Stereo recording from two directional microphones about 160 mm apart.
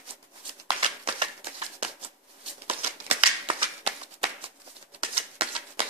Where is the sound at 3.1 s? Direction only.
35° right (ahead or behind).